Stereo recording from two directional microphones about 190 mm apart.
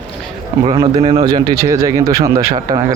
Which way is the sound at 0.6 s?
25° right (ahead or behind).